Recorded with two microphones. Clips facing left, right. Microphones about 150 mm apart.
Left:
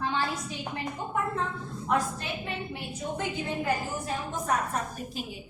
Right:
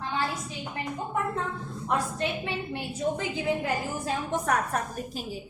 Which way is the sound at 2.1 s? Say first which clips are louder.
Right 5 dB; 90° right.